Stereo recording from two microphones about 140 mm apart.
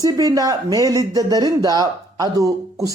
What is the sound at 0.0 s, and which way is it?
Speech, 25° right (ahead or behind).